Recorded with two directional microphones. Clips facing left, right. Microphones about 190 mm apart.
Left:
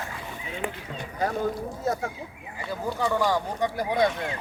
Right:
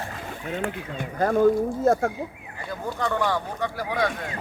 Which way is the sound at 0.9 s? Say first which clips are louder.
Right 7 dB; 50° right (ahead or behind).